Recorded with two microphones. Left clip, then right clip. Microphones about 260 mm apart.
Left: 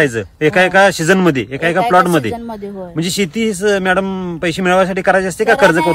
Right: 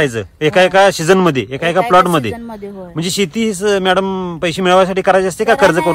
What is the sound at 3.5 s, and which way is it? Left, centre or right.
Speech, right.